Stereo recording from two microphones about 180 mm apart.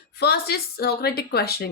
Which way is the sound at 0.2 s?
60° left (ahead or behind).